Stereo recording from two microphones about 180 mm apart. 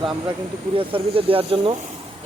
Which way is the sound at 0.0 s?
30° right (ahead or behind).